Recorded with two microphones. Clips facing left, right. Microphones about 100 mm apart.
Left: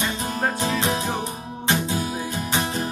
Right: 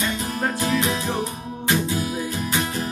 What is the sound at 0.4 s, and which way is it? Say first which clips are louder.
Music: right 1 dB; 25° left (ahead or behind).